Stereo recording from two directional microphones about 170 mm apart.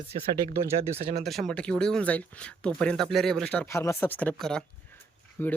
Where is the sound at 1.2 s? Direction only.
Centre (ahead or behind).